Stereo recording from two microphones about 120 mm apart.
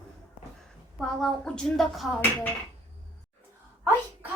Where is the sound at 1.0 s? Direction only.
5° left (ahead or behind).